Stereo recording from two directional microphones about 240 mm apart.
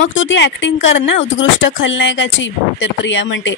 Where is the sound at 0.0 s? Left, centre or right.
Left.